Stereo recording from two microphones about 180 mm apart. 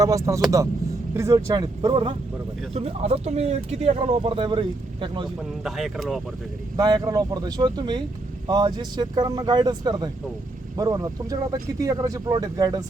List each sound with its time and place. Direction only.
0.0 s speech: 20° right (ahead or behind)
5.6 s speech: centre (ahead or behind)
6.7 s speech: 20° right (ahead or behind)